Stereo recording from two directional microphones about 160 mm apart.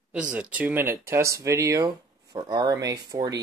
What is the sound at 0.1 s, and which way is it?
Speech, 5° right (ahead or behind).